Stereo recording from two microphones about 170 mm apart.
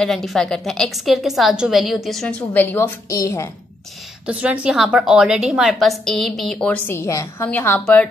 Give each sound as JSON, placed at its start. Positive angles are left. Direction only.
{"t": 0.0, "sound": "a woman's voice", "side_deg": 0}
{"t": 4.3, "sound": "a woman's voice", "side_deg": -5}